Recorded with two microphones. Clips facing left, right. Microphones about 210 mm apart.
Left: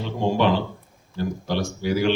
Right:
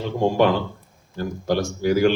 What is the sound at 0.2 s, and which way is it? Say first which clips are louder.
Speech: right 2 dB; 45° right (ahead or behind).